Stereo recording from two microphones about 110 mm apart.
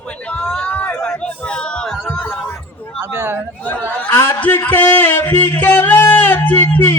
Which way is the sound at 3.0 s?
20° right (ahead or behind).